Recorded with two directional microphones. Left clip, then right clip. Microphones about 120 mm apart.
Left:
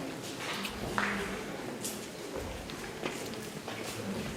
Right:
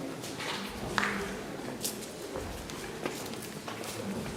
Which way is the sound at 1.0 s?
45° right (ahead or behind).